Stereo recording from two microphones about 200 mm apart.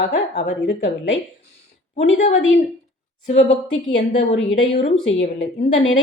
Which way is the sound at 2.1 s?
35° left (ahead or behind).